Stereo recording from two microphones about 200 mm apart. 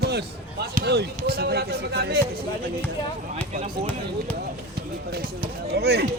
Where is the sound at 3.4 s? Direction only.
10° left (ahead or behind).